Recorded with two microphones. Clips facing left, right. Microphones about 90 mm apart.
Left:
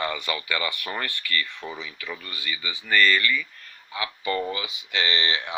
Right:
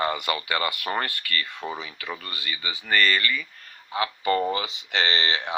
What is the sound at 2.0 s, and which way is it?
Speech, 50° right (ahead or behind).